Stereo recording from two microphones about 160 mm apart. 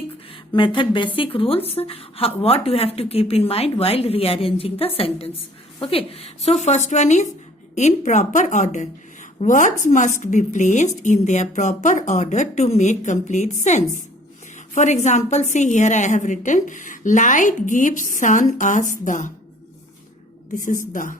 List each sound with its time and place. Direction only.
0.5 s a woman's voice: 30° left (ahead or behind); by 19.3 s 50° left (ahead or behind)
20.9 s speech: 55° left (ahead or behind)